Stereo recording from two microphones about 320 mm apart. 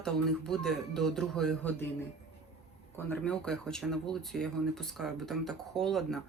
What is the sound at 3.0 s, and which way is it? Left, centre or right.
Speech, centre.